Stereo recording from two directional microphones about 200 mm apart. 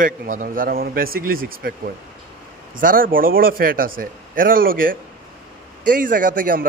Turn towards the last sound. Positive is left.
turn(degrees=-45)  # may be behind; listen again after turning